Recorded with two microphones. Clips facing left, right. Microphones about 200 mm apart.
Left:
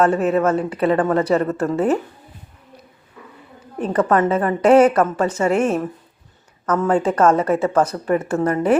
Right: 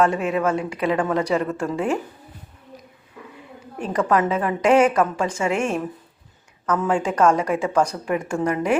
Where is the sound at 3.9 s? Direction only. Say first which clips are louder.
Left 3 dB; 35° left (ahead or behind).